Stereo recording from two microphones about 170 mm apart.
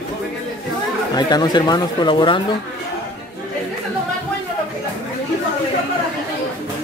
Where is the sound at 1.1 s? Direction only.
25° left (ahead or behind).